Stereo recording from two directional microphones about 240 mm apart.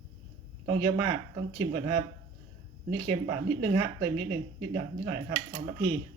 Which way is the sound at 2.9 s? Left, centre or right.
Right.